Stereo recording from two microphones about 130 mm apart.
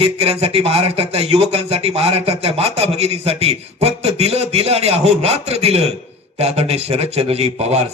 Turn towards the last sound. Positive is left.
turn(degrees=-50)  # may be behind; listen again after turning